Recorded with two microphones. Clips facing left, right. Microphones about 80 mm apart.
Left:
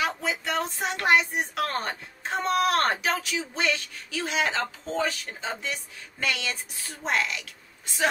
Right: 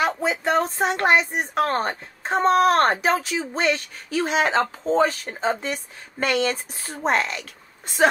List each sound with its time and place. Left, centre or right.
0.2 s speech: right